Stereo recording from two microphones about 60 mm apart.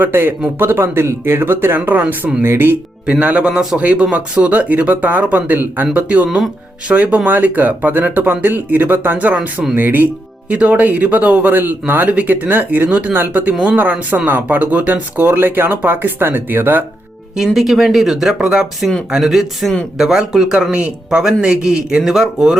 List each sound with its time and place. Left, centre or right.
0.0 s speech: right
3.1 s speech: right
17.3 s speech: centre
18.8 s speech: centre
19.1 s speech: centre